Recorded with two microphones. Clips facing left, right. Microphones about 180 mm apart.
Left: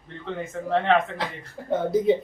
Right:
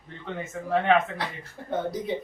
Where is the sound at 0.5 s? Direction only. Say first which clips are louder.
Left 1 dB; 5° right (ahead or behind).